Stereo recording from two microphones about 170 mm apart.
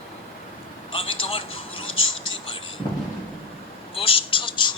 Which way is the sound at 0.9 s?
30° left (ahead or behind).